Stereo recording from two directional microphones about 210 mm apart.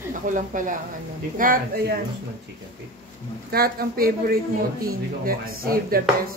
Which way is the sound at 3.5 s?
45° right (ahead or behind).